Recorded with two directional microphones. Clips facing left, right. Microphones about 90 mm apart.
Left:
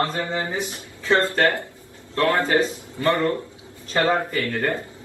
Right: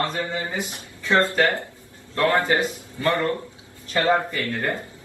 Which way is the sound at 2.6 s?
25° left (ahead or behind).